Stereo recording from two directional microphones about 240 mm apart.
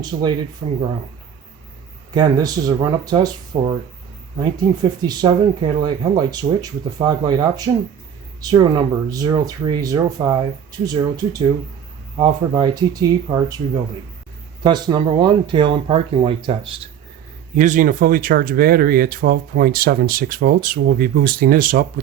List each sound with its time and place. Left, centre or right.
0.0 s speech: centre
2.1 s speech: centre
3.5 s speech: right
4.8 s speech: centre
14.6 s speech: centre
17.6 s speech: right